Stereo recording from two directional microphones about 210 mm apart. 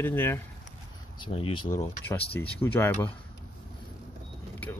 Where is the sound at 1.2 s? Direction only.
25° left (ahead or behind).